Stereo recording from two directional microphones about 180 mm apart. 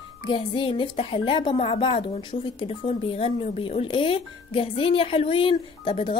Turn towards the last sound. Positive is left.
turn(degrees=30)  # may be behind; listen again after turning